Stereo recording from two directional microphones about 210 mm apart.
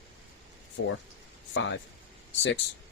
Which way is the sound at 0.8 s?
90° left.